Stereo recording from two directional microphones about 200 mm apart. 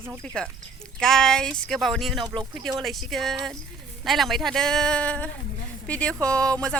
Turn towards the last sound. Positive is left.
turn(degrees=5)  # may be behind; listen again after turning